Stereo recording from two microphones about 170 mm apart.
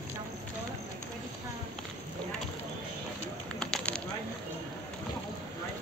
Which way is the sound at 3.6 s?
5° left (ahead or behind).